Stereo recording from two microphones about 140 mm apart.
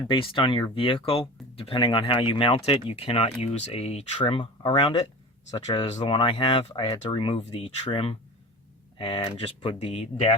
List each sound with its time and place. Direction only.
0.1 s speech: 35° left (ahead or behind)
5.8 s speech: 40° left (ahead or behind)